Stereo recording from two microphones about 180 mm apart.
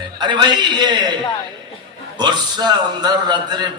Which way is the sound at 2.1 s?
25° right (ahead or behind).